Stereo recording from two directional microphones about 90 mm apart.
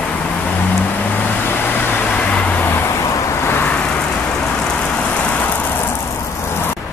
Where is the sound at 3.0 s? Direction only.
35° left (ahead or behind).